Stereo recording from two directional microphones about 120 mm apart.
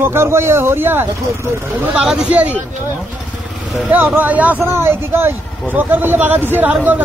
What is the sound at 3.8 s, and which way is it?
A man's voice, 15° right (ahead or behind).